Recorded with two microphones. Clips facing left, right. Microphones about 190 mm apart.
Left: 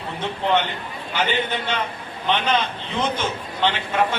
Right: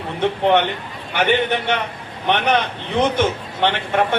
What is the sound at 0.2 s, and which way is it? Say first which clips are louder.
Speech: right 6 dB; 60° right (ahead or behind).